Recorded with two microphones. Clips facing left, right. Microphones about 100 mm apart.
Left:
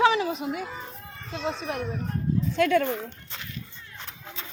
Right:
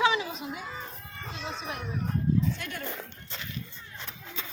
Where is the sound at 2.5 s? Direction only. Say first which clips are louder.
Left 16 dB; 90° left.